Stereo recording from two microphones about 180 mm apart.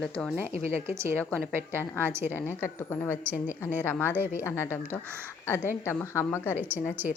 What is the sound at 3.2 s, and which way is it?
A woman's voice, 10° right (ahead or behind).